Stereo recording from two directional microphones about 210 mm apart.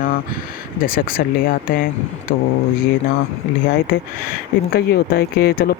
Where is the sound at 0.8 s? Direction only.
45° left (ahead or behind).